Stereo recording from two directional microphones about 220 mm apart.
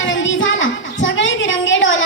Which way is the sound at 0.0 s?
60° left (ahead or behind).